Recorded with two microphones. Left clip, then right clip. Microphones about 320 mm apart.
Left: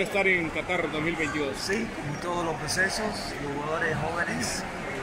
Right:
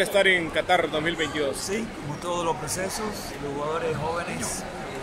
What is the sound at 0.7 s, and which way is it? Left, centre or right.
Speech, right.